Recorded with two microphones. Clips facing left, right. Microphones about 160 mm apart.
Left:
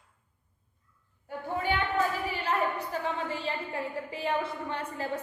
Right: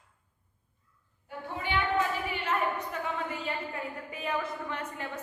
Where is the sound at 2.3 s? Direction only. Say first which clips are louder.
Left 1 dB; 35° left (ahead or behind).